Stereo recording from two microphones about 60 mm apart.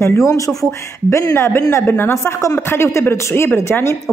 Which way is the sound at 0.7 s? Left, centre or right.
Left.